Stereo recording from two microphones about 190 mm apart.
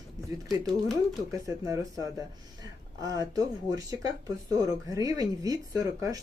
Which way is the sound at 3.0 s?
20° right (ahead or behind).